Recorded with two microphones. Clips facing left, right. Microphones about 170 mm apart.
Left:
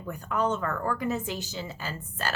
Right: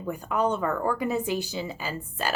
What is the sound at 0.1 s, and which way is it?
A woman's voice, 10° right (ahead or behind).